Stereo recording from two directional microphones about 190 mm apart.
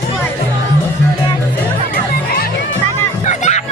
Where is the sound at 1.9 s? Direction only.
50° left (ahead or behind).